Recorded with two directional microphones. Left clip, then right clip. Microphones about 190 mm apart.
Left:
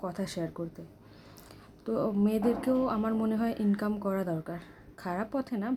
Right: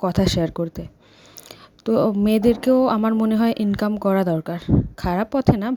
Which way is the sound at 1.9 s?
40° right (ahead or behind).